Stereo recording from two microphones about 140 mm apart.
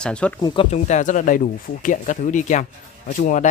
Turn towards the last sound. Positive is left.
turn(degrees=60)  # may be behind; listen again after turning